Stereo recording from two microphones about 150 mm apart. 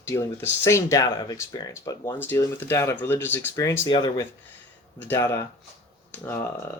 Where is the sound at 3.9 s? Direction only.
30° left (ahead or behind).